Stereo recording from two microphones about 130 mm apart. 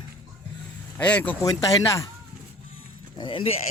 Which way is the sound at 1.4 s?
25° left (ahead or behind).